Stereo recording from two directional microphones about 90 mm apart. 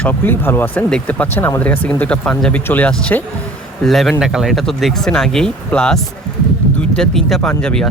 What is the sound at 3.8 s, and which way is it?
Speech, centre (ahead or behind).